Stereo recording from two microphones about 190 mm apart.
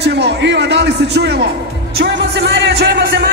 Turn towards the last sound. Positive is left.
turn(degrees=-60)  # may be behind; listen again after turning